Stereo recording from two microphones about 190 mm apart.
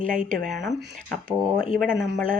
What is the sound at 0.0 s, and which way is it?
Speech, 45° right (ahead or behind).